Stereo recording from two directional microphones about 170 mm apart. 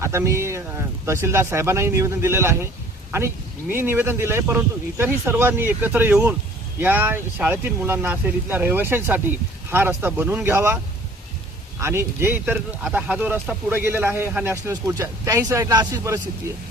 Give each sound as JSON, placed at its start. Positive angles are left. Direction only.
{"t": 0.0, "sound": "speech", "side_deg": -15}
{"t": 11.8, "sound": "speech", "side_deg": -15}